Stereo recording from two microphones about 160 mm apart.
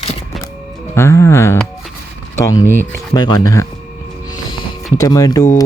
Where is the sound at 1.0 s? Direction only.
15° left (ahead or behind).